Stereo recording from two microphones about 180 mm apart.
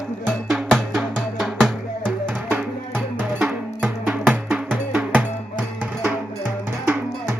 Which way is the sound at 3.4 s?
5° right (ahead or behind).